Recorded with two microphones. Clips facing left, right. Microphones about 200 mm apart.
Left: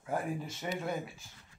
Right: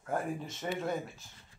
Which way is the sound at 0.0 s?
Centre (ahead or behind).